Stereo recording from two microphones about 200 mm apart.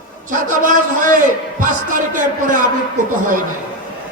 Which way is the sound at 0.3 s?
40° right (ahead or behind).